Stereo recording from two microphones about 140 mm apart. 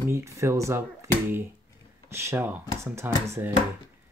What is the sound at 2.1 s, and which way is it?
Speech, 20° right (ahead or behind).